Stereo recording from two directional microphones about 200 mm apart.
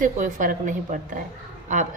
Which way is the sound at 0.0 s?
40° right (ahead or behind).